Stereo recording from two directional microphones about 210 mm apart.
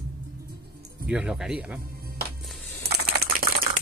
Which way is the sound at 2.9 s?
50° right (ahead or behind).